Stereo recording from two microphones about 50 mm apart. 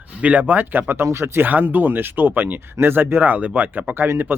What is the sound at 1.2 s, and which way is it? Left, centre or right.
Speech, right.